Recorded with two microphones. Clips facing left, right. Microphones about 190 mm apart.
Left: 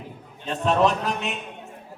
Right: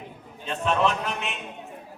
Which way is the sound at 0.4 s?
40° left (ahead or behind).